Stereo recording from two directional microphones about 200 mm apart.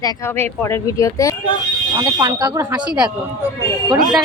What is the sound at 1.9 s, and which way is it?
Speech, 20° right (ahead or behind).